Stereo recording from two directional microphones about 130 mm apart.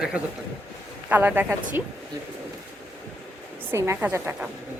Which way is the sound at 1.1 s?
15° right (ahead or behind).